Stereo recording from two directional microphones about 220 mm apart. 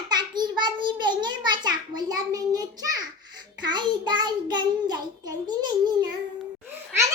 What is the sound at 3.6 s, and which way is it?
Child singing, 20° right (ahead or behind).